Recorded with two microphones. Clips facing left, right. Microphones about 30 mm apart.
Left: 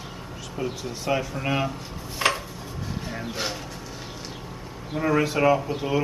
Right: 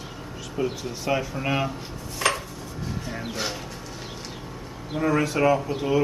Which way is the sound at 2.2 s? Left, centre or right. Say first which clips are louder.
Left 1 dB; centre.